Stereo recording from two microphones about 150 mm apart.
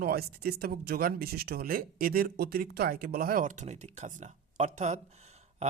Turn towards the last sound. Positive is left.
turn(degrees=-50)  # may be behind; listen again after turning